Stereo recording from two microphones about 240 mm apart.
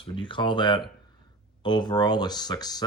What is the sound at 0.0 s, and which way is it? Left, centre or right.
Speech, left.